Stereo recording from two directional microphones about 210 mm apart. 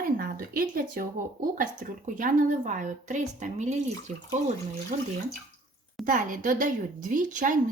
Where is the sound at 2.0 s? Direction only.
40° right (ahead or behind).